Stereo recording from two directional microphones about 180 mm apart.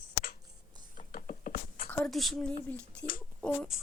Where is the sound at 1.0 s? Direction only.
45° left (ahead or behind).